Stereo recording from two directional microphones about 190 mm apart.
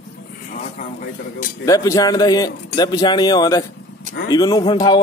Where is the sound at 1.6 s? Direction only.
20° left (ahead or behind).